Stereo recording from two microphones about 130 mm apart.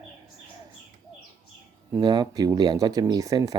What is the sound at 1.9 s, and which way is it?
Speech, 35° right (ahead or behind).